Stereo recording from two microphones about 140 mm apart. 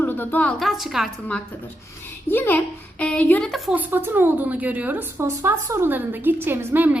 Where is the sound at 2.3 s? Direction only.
15° left (ahead or behind).